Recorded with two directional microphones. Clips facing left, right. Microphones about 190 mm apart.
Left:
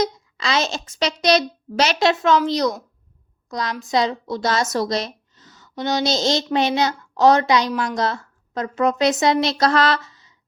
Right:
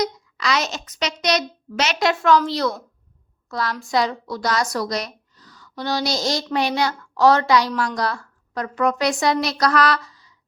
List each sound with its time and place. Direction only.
0.0 s a child's voice: 25° left (ahead or behind)